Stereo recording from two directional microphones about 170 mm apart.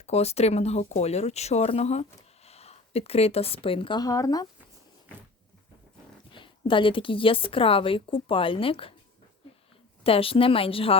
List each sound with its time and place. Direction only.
0.0 s a woman's voice: 40° left (ahead or behind); by 4.4 s 20° left (ahead or behind)
6.3 s a woman's voice: 30° left (ahead or behind)
10.0 s a woman's voice: 35° left (ahead or behind)